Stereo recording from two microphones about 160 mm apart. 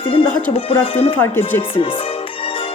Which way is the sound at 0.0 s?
35° left (ahead or behind).